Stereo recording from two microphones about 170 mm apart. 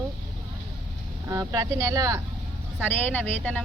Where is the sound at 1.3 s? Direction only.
20° right (ahead or behind).